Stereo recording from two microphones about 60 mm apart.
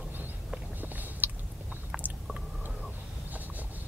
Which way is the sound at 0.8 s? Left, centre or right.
Right.